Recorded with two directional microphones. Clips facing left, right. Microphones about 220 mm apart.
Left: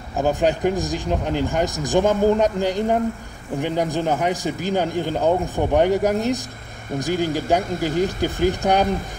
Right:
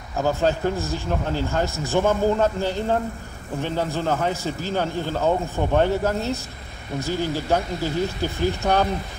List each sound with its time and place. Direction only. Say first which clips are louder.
0.2 s a man's voice: left 2 dB; 15° left (ahead or behind)